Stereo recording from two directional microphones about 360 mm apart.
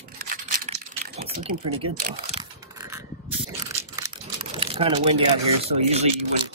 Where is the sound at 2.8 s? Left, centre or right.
Centre.